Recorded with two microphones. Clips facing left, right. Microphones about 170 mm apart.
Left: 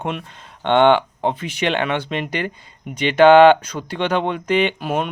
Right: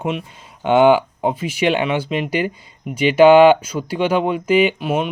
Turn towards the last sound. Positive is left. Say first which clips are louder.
# right 3 dB
turn(degrees=0)  # may be behind; listen again after turning